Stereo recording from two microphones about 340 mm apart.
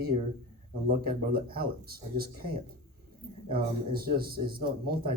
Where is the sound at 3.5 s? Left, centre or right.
Right.